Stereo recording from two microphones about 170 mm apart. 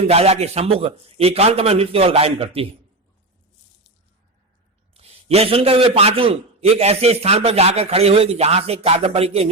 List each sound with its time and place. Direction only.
0.0 s a man's voice: 35° right (ahead or behind)
4.9 s a man's voice: 35° right (ahead or behind)